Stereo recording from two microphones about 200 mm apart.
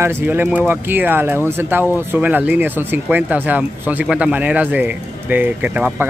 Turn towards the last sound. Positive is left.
turn(degrees=-10)  # may be behind; listen again after turning